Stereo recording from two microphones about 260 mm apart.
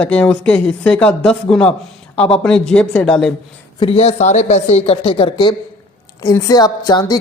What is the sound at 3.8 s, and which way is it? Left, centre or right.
A woman's voice, left.